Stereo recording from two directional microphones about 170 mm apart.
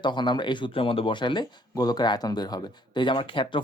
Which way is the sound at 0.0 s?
25° left (ahead or behind).